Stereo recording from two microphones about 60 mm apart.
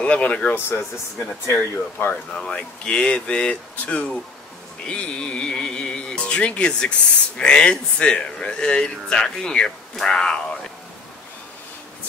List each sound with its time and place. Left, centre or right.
0.0 s speech: centre
1.5 s speech: left
2.3 s speech: centre
4.8 s music: centre
7.3 s speech: centre